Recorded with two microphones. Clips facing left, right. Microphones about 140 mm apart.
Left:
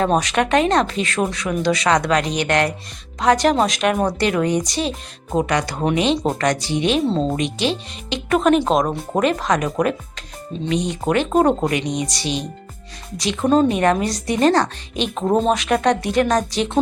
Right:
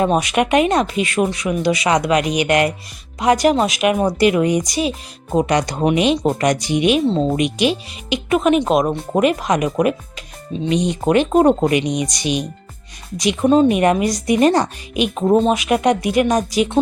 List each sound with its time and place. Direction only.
0.0 s speech: 10° right (ahead or behind)
5.5 s speech: 20° right (ahead or behind)
7.1 s speech: centre (ahead or behind)
7.3 s speech: 15° right (ahead or behind)